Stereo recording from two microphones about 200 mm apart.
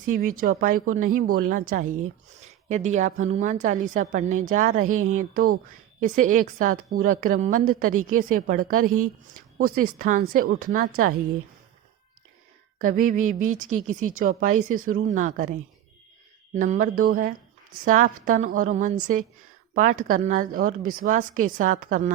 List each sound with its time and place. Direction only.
0.1 s speech: 45° right (ahead or behind)
4.9 s a woman's voice: 90° right
5.1 s speech: 45° right (ahead or behind)
12.8 s speech: 40° right (ahead or behind)
16.6 s speech: 40° right (ahead or behind)